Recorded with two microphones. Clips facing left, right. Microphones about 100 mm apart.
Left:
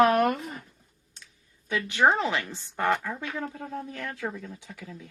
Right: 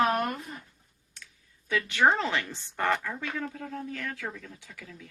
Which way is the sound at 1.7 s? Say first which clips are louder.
Left 1 dB; 20° left (ahead or behind).